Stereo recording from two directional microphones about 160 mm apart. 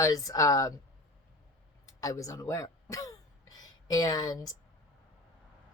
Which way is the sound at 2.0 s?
20° left (ahead or behind).